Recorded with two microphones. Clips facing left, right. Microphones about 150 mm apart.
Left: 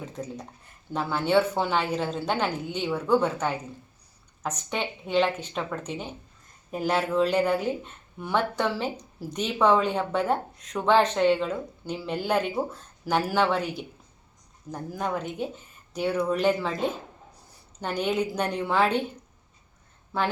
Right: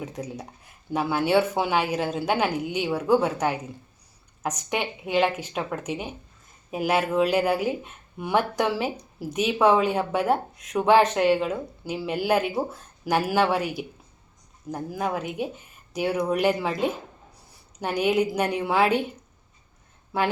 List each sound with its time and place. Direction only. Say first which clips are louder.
0.0 s speech: right 2 dB; 10° right (ahead or behind)